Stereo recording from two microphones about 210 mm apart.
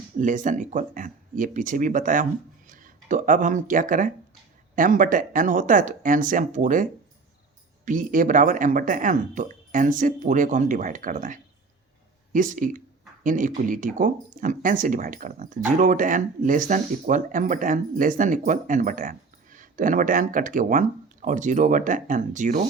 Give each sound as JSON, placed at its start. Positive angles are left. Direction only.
{"t": 0.2, "sound": "speech", "side_deg": -40}
{"t": 7.9, "sound": "speech", "side_deg": -40}